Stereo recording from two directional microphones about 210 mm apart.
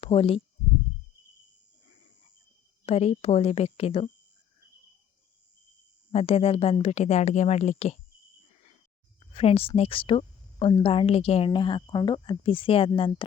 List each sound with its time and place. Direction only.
0.0 s speech: 25° left (ahead or behind)
2.8 s a woman's voice: 30° left (ahead or behind)
6.1 s speech: 30° left (ahead or behind)
9.3 s a woman's voice: 30° left (ahead or behind)